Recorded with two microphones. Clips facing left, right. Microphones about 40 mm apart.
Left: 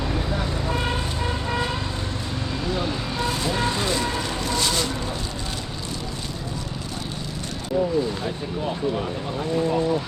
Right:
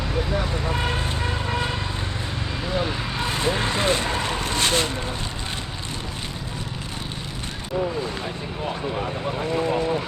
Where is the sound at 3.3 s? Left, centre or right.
Right.